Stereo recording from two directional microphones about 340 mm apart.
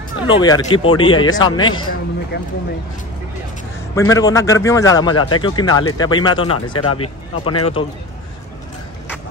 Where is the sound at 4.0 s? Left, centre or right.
Centre.